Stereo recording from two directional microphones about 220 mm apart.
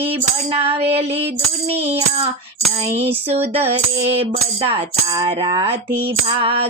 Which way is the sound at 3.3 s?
25° right (ahead or behind).